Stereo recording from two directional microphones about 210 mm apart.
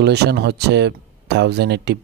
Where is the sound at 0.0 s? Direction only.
50° right (ahead or behind).